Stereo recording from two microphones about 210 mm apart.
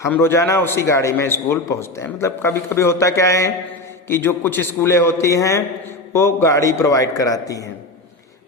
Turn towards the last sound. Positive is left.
turn(degrees=15)  # may be behind; listen again after turning